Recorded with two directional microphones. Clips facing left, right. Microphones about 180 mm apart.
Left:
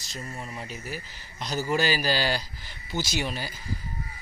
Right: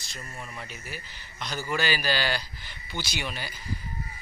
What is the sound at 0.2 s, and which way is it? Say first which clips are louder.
Speech: left 3 dB; 30° left (ahead or behind).